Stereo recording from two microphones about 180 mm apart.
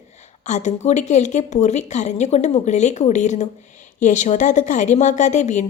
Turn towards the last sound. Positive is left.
turn(degrees=40)  # may be behind; listen again after turning